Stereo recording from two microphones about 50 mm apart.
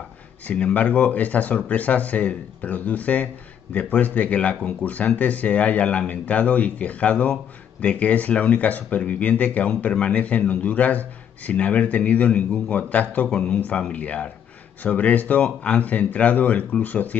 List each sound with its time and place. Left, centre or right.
0.7 s speech: left